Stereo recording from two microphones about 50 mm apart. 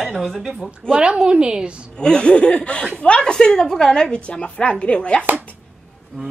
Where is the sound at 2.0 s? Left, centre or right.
Centre.